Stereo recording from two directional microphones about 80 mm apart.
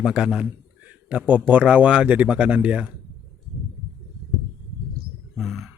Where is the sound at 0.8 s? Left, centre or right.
Centre.